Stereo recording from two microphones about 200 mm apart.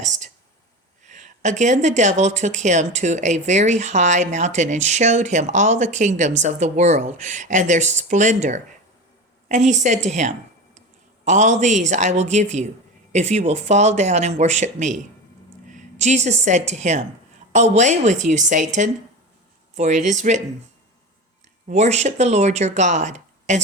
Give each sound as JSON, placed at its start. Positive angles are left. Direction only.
{"t": 0.0, "sound": "a sound", "side_deg": -35}
{"t": 1.0, "sound": "speech", "side_deg": -35}
{"t": 21.7, "sound": "speech", "side_deg": -35}